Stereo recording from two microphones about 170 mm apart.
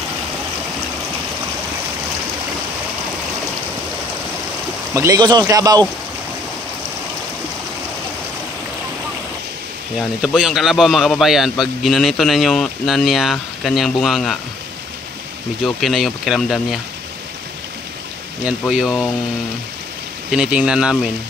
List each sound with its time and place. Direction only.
4.9 s speech: 20° right (ahead or behind)
9.9 s a man's voice: 5° right (ahead or behind)
15.6 s a man's voice: centre (ahead or behind)
18.4 s a man's voice: 5° right (ahead or behind)
20.2 s a man's voice: 5° right (ahead or behind)